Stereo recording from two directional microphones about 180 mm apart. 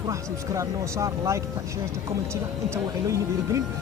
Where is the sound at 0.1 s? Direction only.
15° right (ahead or behind).